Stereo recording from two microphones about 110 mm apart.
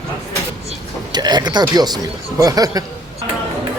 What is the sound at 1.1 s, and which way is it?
Speech, 40° right (ahead or behind).